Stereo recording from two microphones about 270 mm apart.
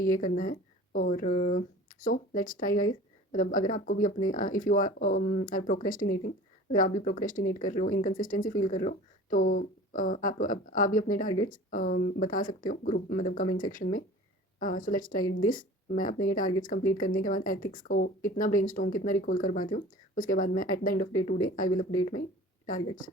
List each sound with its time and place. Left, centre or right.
0.0 s speech: left